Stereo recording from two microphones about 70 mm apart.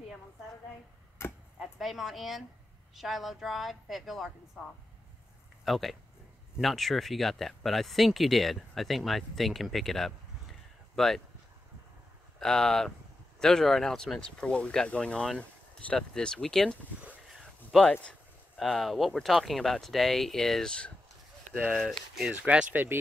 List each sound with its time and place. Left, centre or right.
1.2 s chop: left
1.6 s a woman's voice: centre
5.7 s speech: centre
12.4 s speech: centre
21.7 s speech: centre
22.3 s speech: centre